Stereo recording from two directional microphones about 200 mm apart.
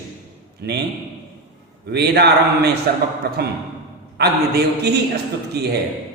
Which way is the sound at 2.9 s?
55° right (ahead or behind).